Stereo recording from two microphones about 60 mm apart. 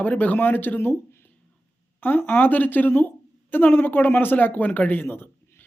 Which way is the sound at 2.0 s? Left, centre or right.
Left.